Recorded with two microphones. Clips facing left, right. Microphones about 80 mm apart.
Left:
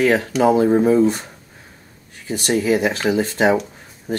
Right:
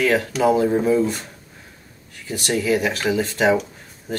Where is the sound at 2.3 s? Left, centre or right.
Left.